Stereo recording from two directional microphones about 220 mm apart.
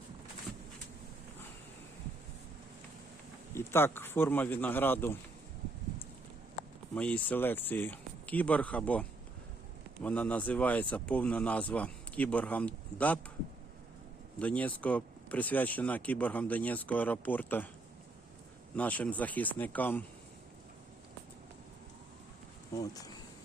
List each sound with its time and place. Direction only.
3.5 s speech: 10° left (ahead or behind)
6.9 s speech: 5° left (ahead or behind)
14.3 s speech: 5° left (ahead or behind)
18.8 s speech: 5° left (ahead or behind)
22.8 s speech: 15° left (ahead or behind)